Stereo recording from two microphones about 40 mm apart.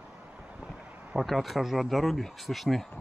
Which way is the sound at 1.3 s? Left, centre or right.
Centre.